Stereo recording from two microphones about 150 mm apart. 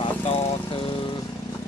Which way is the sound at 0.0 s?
40° left (ahead or behind).